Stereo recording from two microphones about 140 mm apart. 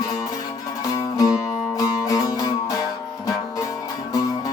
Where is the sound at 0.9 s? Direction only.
25° left (ahead or behind).